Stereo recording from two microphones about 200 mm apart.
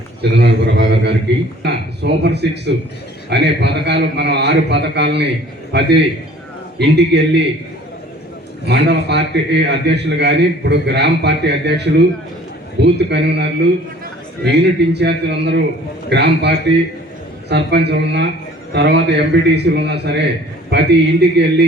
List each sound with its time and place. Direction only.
0.2 s a man's voice: 60° right (ahead or behind)
8.6 s a man's voice: 60° right (ahead or behind)
17.5 s a man's voice: 55° right (ahead or behind)